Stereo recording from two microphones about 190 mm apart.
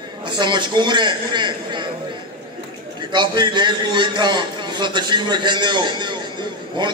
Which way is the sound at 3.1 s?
25° right (ahead or behind).